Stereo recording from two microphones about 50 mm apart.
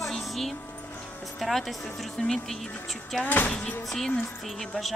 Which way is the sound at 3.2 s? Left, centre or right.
Left.